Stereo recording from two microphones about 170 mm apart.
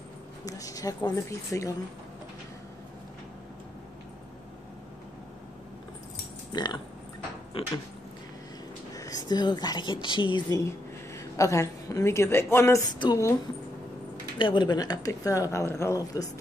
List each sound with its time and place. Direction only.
0.5 s speech: 20° left (ahead or behind)
6.5 s speech: 25° left (ahead or behind)
8.9 s a woman's voice: 20° left (ahead or behind)
14.4 s speech: 25° left (ahead or behind)